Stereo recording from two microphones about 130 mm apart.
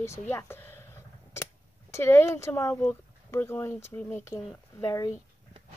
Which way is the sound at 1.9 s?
20° left (ahead or behind).